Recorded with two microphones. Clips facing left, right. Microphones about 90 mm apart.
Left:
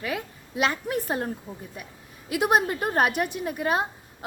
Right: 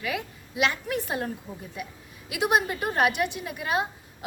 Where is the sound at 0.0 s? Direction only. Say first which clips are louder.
Even; 40° left (ahead or behind).